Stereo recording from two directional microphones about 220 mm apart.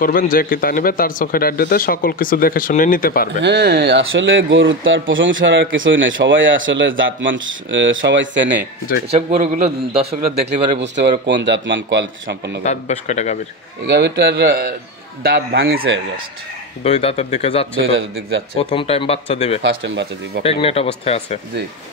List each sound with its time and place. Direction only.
0.0 s speech: 40° left (ahead or behind)
3.4 s speech: 50° right (ahead or behind)
9.1 s a man's voice: 30° right (ahead or behind)
10.8 s a man's voice: 50° right (ahead or behind)
12.6 s speech: 30° left (ahead or behind)
13.8 s a man's voice: 50° right (ahead or behind)
16.8 s speech: 30° left (ahead or behind)
17.8 s speech: 60° right (ahead or behind)
18.6 s speech: 25° left (ahead or behind)
19.6 s a man's voice: 55° right (ahead or behind)
20.4 s speech: 25° left (ahead or behind)